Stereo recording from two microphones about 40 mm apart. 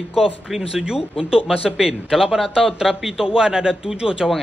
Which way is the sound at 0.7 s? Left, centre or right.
Centre.